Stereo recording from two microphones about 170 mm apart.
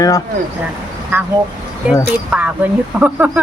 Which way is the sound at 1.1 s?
15° right (ahead or behind).